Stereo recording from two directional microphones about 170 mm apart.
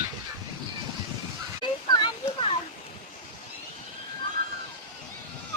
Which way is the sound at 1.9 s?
25° left (ahead or behind).